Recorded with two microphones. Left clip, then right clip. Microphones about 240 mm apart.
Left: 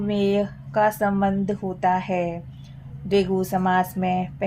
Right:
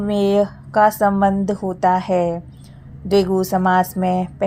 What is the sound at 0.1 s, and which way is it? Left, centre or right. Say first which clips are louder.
A woman's voice: right 6 dB; right.